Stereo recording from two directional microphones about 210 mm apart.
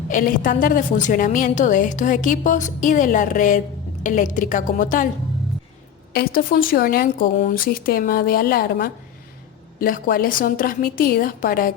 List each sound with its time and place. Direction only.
0.1 s a woman's voice: 40° left (ahead or behind)
6.1 s a woman's voice: 45° left (ahead or behind)